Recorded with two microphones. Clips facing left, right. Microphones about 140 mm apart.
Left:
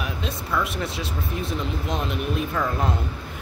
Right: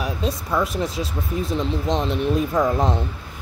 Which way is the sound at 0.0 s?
40° right (ahead or behind).